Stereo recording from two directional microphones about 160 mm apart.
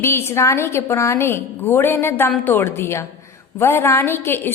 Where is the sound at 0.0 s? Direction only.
15° left (ahead or behind).